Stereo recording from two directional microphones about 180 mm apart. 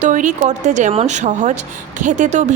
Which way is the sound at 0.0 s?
45° right (ahead or behind).